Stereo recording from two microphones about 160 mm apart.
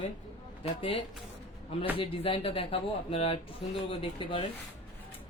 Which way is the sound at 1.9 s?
35° left (ahead or behind).